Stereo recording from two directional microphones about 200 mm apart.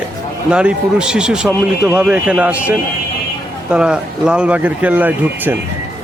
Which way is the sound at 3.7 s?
5° right (ahead or behind).